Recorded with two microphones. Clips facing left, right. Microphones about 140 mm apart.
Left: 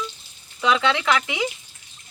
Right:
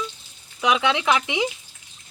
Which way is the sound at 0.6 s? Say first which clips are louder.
Even; 15° right (ahead or behind).